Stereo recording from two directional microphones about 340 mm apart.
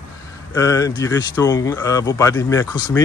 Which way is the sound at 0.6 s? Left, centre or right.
Centre.